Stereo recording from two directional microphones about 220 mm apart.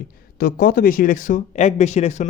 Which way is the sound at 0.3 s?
45° left (ahead or behind).